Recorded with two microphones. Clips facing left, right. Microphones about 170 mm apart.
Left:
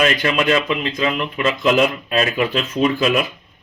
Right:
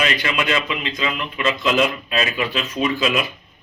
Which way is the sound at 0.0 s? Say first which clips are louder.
Left 5 dB; 45° left (ahead or behind).